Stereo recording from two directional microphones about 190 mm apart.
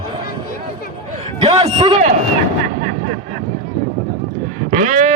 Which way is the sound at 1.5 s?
30° right (ahead or behind).